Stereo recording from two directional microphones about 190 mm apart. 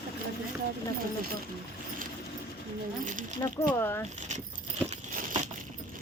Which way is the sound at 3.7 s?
15° left (ahead or behind).